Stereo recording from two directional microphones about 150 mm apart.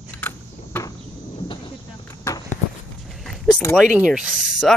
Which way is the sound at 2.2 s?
20° left (ahead or behind).